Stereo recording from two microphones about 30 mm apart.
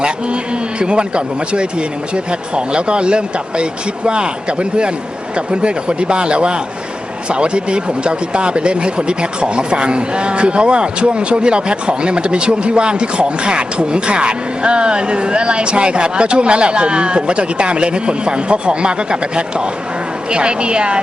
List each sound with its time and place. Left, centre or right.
0.8 s speech: right
5.5 s speech: right